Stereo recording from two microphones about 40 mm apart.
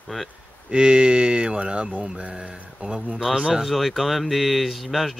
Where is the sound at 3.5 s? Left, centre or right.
Centre.